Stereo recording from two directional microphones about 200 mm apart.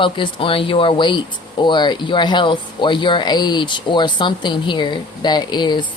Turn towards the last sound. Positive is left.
turn(degrees=20)  # may be behind; listen again after turning